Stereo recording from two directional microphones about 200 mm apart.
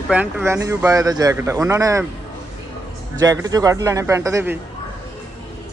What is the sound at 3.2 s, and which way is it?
Speech, 20° right (ahead or behind).